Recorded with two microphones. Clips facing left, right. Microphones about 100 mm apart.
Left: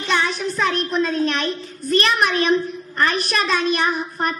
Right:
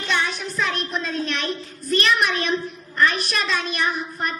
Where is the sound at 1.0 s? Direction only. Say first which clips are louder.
Left 5 dB; 45° left (ahead or behind).